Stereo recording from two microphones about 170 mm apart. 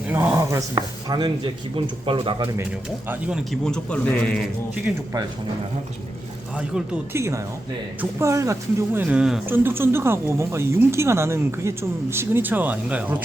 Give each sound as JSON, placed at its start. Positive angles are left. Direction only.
{"t": 0.1, "sound": "speech", "side_deg": -15}
{"t": 3.1, "sound": "a man's voice", "side_deg": -5}
{"t": 6.6, "sound": "speech", "side_deg": -5}